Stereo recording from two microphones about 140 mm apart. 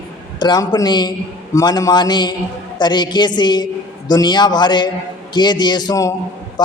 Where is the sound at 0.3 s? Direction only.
30° left (ahead or behind).